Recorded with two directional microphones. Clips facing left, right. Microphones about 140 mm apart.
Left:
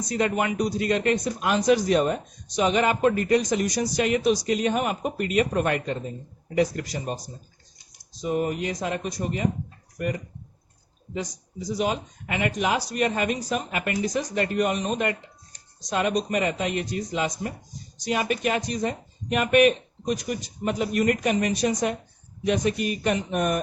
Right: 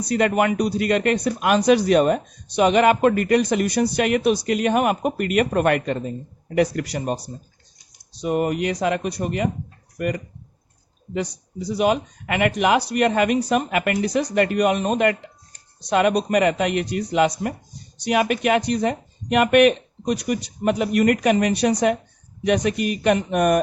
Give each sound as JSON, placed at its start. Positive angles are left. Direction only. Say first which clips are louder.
{"t": 0.0, "sound": "speech", "louder": "right 5 dB", "side_deg": -65}
{"t": 11.1, "sound": "speech", "louder": "right 5 dB", "side_deg": -65}